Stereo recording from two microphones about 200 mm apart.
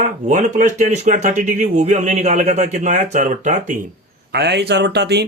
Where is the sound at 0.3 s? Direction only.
40° right (ahead or behind).